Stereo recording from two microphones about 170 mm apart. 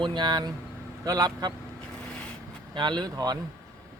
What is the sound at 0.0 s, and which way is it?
Speech, 25° right (ahead or behind).